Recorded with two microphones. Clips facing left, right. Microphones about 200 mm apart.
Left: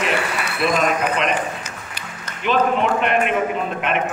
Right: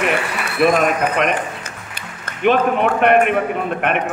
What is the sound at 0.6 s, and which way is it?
Speech, 55° right (ahead or behind).